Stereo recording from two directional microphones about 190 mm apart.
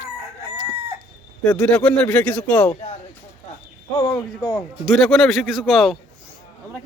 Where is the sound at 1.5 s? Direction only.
5° left (ahead or behind).